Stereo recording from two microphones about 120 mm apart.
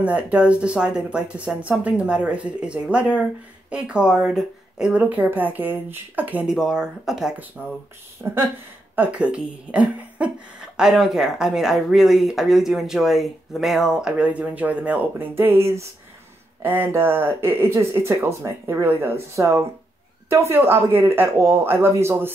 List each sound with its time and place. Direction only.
0.0 s speech: 10° right (ahead or behind)
7.6 s speech: 20° right (ahead or behind)